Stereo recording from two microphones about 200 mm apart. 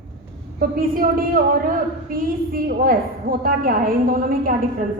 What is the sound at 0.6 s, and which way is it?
A woman's voice, 45° right (ahead or behind).